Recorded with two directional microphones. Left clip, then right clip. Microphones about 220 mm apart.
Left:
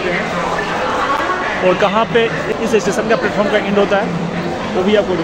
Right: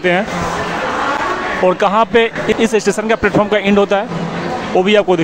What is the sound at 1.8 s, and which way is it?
Speech, 30° right (ahead or behind).